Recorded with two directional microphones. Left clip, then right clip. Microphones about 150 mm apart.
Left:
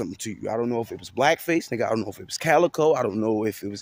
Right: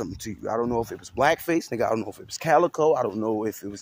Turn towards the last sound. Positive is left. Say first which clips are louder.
# left 2 dB
turn(degrees=35)  # may be behind; listen again after turning